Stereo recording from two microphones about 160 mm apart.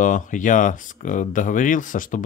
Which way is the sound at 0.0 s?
55° left (ahead or behind).